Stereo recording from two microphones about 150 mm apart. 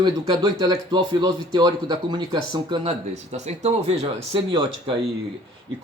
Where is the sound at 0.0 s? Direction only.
30° right (ahead or behind).